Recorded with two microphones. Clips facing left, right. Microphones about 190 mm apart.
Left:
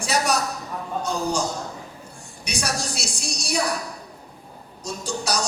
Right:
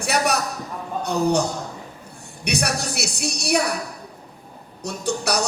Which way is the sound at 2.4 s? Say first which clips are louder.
Right 4 dB; 60° right (ahead or behind).